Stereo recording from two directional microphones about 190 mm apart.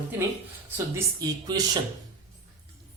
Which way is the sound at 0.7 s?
15° right (ahead or behind).